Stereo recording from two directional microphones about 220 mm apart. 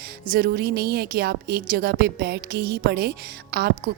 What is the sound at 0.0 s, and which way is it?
Speech, 45° right (ahead or behind).